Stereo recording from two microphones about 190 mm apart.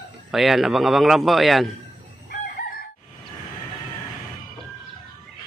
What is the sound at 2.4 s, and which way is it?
Crowing, 50° left (ahead or behind).